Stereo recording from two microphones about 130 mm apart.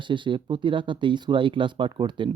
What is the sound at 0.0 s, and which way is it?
Speech, 40° right (ahead or behind).